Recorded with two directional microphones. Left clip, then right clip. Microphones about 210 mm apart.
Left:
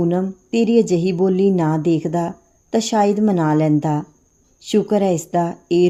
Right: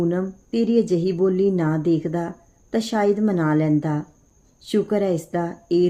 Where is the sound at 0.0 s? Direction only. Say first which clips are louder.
Left 3 dB; 30° left (ahead or behind).